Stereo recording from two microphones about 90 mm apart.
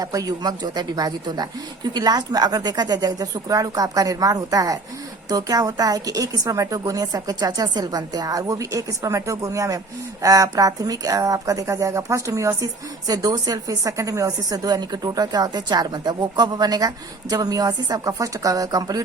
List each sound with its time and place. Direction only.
0.0 s speech: 40° right (ahead or behind)